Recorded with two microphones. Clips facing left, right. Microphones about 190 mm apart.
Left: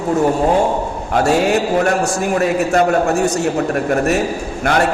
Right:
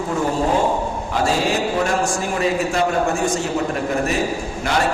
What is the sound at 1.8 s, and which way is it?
A man's voice, 65° left (ahead or behind).